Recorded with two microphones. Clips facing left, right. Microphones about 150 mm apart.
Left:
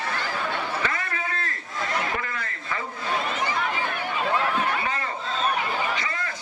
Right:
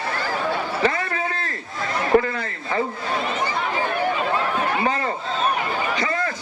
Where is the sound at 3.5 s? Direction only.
40° right (ahead or behind).